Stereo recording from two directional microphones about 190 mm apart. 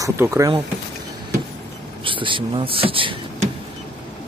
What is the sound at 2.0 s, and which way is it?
Speech, 25° right (ahead or behind).